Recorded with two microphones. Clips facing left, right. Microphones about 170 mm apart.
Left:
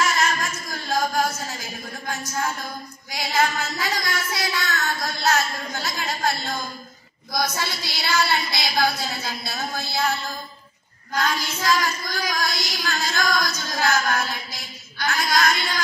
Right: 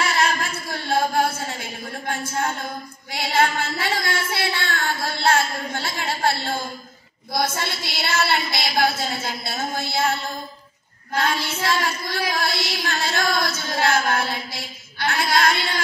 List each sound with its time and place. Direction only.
0.0 s singing: 30° right (ahead or behind)
3.1 s speech: 30° right (ahead or behind)
11.1 s speech: 30° right (ahead or behind)